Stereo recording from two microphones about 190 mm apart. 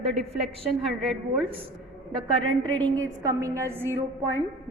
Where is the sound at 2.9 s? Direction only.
20° right (ahead or behind).